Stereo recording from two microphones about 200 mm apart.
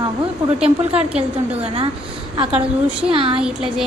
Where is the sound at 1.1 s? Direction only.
30° right (ahead or behind).